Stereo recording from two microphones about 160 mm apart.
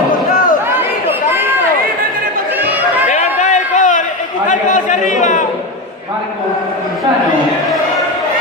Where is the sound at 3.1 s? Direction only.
50° left (ahead or behind).